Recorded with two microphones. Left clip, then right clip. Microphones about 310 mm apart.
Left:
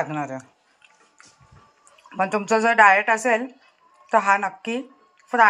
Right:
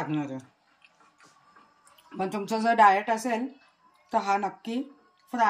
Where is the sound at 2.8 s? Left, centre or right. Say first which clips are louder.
Left 4 dB; centre.